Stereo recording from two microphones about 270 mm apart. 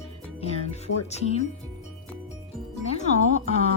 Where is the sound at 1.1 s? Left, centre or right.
Left.